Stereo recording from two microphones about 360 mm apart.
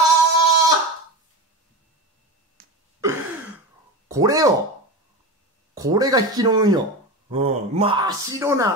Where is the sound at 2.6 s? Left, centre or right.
Right.